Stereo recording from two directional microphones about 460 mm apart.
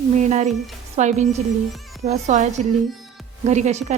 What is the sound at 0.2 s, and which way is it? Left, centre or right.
A woman's voice, centre.